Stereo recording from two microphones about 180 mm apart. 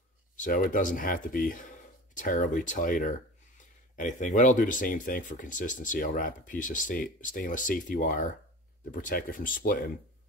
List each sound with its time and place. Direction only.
0.4 s speech: 50° left (ahead or behind)